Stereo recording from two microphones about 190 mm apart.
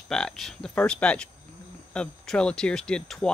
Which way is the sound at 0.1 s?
Centre (ahead or behind).